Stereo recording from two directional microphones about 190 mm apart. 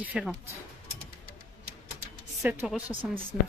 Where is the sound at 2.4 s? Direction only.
10° right (ahead or behind).